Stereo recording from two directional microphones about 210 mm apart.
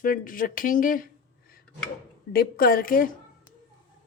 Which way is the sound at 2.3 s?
45° left (ahead or behind).